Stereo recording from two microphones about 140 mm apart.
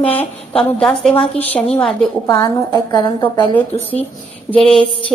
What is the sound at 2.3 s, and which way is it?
A woman's voice, 25° left (ahead or behind).